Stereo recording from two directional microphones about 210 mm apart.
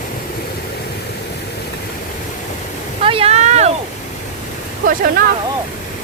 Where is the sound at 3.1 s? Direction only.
30° right (ahead or behind).